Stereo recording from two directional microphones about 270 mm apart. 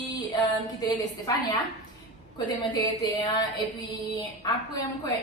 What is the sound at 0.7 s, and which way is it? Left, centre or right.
A woman's voice, centre.